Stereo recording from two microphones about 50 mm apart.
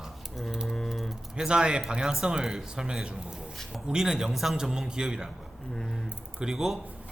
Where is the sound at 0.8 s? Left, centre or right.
Centre.